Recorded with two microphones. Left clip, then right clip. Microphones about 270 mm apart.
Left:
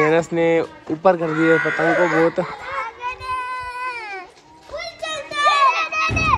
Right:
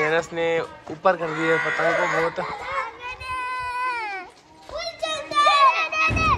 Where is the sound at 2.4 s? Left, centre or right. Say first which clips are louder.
Left 1 dB; right.